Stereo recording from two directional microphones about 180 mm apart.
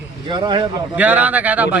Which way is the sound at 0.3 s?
25° right (ahead or behind).